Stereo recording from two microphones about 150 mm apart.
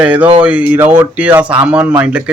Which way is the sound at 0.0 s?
10° right (ahead or behind).